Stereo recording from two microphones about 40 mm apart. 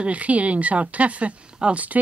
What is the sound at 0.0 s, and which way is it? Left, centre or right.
Speech, right.